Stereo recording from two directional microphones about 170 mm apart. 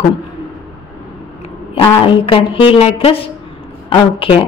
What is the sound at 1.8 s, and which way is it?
Speech, 30° left (ahead or behind).